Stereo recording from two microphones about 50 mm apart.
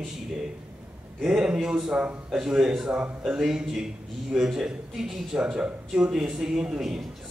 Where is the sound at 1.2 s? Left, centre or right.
Centre.